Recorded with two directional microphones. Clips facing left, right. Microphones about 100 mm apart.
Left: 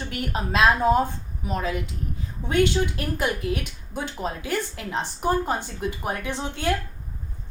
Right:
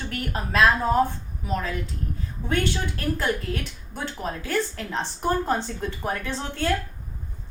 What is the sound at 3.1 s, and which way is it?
A woman's voice, 15° left (ahead or behind).